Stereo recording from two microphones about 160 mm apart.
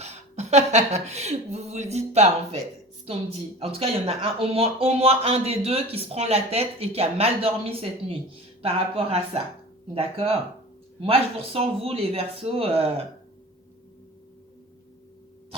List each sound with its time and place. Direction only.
0.0 s speech: 45° right (ahead or behind)
3.6 s speech: 40° right (ahead or behind)